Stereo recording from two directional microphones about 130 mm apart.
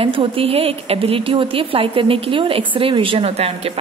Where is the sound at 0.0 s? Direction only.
45° right (ahead or behind).